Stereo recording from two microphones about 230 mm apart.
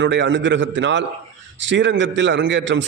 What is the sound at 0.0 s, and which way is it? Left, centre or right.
A man's voice, right.